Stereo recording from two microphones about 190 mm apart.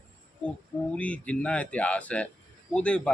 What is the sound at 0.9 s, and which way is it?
A man's voice, 5° left (ahead or behind).